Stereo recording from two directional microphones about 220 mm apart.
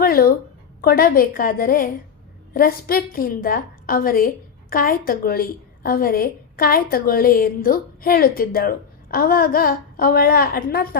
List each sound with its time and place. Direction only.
0.0 s a woman's voice: 40° left (ahead or behind)